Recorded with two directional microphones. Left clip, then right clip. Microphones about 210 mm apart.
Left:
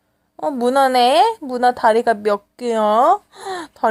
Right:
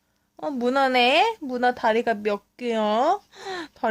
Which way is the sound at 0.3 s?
20° right (ahead or behind).